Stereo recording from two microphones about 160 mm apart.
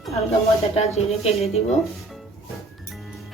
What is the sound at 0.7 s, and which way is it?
Speech, 40° left (ahead or behind).